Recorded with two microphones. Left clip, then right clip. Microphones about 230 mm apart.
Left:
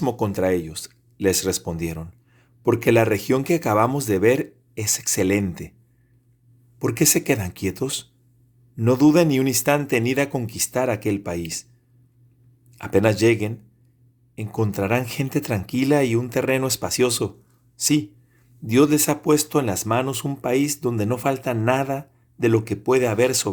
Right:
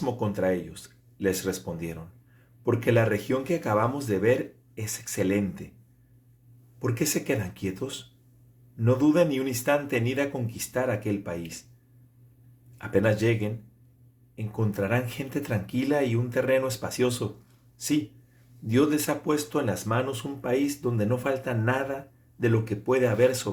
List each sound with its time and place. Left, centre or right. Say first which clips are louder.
0.0 s speech: left 5 dB; left
6.7 s speech: left 8 dB; left
12.7 s speech: left 5 dB; left